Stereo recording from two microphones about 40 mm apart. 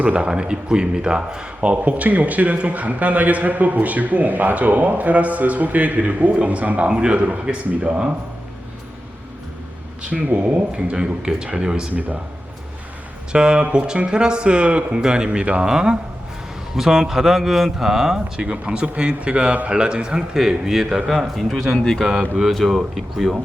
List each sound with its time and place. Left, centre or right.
0.0 s a man's voice: right
1.6 s a man's voice: right
10.1 s speech: right
10.7 s a man's voice: right
11.9 s a man's voice: right
13.3 s a man's voice: right
15.0 s a man's voice: right
18.3 s a man's voice: right; by 23.3 s centre